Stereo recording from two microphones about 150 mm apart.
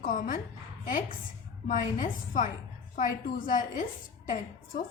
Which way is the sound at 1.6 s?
60° left (ahead or behind).